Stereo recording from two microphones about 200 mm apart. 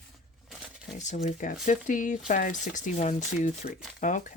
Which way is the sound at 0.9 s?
35° left (ahead or behind).